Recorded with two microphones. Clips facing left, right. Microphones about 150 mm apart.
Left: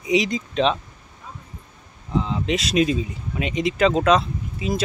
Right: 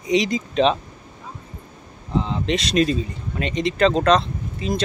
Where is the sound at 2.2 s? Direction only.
5° left (ahead or behind).